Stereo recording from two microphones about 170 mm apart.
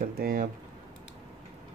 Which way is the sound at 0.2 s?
55° right (ahead or behind).